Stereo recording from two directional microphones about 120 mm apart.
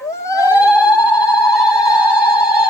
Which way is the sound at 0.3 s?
25° left (ahead or behind).